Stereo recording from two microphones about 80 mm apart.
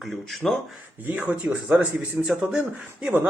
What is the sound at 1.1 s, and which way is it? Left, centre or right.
A man's voice, centre.